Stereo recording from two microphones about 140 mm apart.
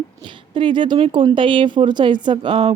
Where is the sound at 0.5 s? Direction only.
35° right (ahead or behind).